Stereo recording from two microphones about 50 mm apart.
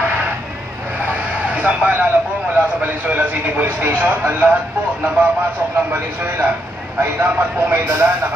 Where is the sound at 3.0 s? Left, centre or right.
Right.